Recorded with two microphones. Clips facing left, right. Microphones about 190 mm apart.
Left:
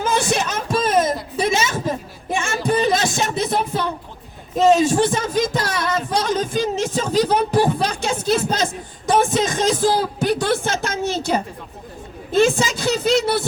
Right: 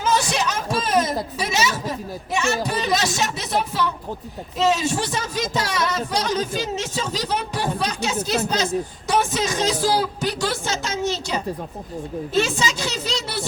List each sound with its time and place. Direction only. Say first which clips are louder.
0.0 s a sound: left 2 dB; 50° left (ahead or behind)
2.6 s music: left 4 dB; 50° left (ahead or behind)
4.5 s speech: left 6 dB; 50° left (ahead or behind)